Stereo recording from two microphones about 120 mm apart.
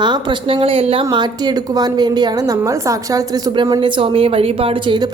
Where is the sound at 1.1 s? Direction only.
35° right (ahead or behind).